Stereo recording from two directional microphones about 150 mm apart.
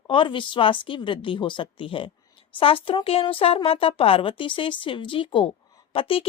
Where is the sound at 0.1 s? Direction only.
35° left (ahead or behind).